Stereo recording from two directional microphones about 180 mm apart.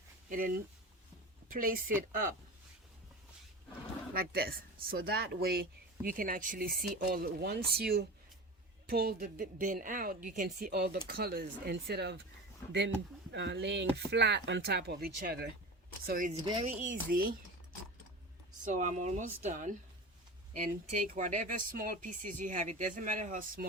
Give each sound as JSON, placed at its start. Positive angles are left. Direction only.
{"t": 0.3, "sound": "speech", "side_deg": -50}
{"t": 4.1, "sound": "speech", "side_deg": -55}
{"t": 13.3, "sound": "speech", "side_deg": -75}
{"t": 16.0, "sound": "speech", "side_deg": -50}
{"t": 16.4, "sound": "speech", "side_deg": -25}
{"t": 16.8, "sound": "speech", "side_deg": -50}
{"t": 18.6, "sound": "speech", "side_deg": -45}